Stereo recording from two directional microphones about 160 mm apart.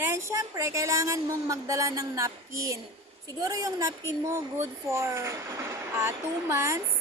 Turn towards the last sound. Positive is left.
turn(degrees=-20)  # may be behind; listen again after turning